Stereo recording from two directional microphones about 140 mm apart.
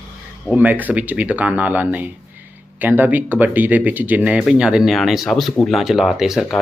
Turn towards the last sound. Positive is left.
turn(degrees=0)  # may be behind; listen again after turning